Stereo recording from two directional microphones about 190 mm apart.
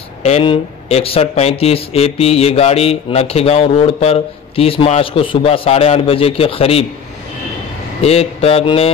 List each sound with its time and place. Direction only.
0.2 s speech: 30° left (ahead or behind)
8.0 s speech: 35° left (ahead or behind)